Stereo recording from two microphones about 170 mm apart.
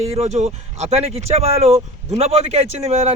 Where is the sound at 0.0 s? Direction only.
40° right (ahead or behind).